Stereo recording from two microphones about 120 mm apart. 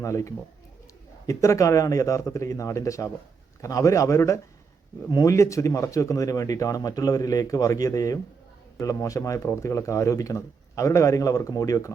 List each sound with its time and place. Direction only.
0.0 s speech: 25° left (ahead or behind)